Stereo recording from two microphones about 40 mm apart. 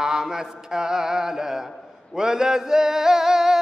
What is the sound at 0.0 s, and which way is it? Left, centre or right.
Mantra, centre.